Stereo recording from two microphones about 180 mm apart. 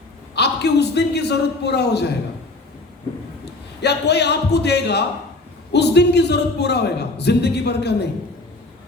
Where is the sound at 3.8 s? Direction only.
70° left (ahead or behind).